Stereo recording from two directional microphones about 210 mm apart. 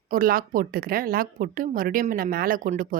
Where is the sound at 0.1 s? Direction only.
45° right (ahead or behind).